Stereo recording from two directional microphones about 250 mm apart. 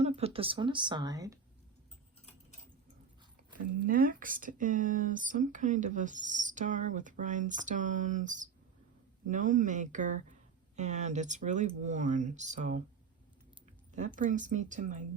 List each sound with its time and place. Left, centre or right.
0.2 s speech: right
3.8 s speech: right